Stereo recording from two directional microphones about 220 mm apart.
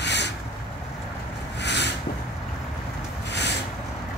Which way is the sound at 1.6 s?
50° left (ahead or behind).